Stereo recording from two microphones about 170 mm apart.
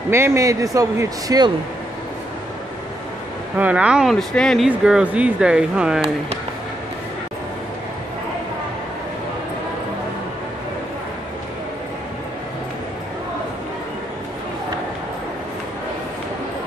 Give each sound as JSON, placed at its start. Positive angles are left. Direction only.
{"t": 0.1, "sound": "speech", "side_deg": -15}
{"t": 3.5, "sound": "speech", "side_deg": -10}